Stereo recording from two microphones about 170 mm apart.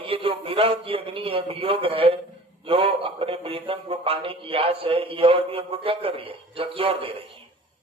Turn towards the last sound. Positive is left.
turn(degrees=-35)  # may be behind; listen again after turning